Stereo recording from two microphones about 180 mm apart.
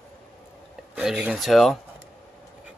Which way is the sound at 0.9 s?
5° right (ahead or behind).